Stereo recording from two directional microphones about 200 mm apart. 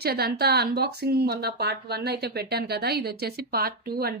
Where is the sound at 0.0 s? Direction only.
55° right (ahead or behind).